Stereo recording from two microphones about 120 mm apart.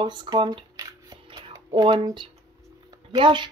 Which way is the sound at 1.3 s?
35° right (ahead or behind).